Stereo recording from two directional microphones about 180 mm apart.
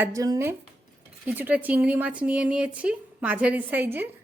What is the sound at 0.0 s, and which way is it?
Speech, 20° right (ahead or behind).